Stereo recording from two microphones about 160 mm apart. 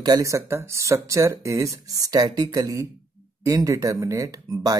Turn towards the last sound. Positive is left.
turn(degrees=-20)  # may be behind; listen again after turning